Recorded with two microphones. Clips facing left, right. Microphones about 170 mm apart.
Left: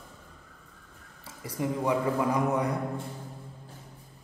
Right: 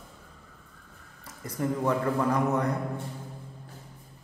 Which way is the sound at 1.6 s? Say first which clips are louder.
Right 1 dB; 10° left (ahead or behind).